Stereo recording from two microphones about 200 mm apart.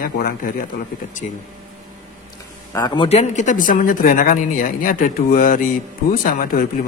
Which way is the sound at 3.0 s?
35° left (ahead or behind).